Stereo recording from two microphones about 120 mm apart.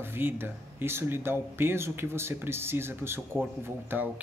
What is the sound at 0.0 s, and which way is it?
Speech, 20° right (ahead or behind).